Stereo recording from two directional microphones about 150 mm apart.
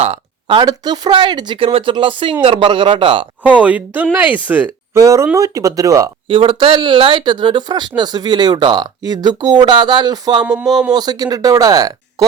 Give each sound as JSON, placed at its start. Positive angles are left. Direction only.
{"t": 0.0, "sound": "speech", "side_deg": -35}
{"t": 3.4, "sound": "speech", "side_deg": -10}
{"t": 6.2, "sound": "speech", "side_deg": -35}
{"t": 10.4, "sound": "speech", "side_deg": -5}
{"t": 10.9, "sound": "speech", "side_deg": -25}